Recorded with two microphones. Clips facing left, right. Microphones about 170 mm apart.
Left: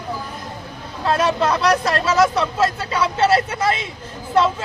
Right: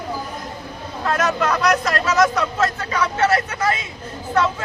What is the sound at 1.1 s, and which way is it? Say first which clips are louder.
Speech: left 2 dB; 30° left (ahead or behind).